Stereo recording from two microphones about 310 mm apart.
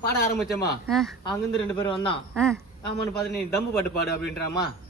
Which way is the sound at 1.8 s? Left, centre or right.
Centre.